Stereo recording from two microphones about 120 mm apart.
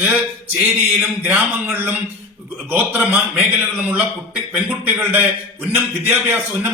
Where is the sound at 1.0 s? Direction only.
5° right (ahead or behind).